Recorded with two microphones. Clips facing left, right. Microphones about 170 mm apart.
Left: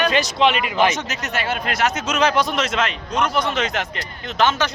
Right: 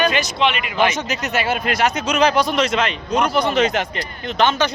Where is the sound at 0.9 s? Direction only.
Centre (ahead or behind).